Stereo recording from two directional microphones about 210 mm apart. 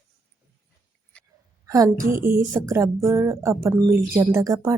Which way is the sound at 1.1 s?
5° left (ahead or behind).